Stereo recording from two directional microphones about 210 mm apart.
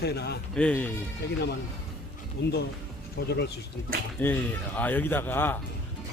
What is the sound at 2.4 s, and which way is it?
Speech, 55° left (ahead or behind).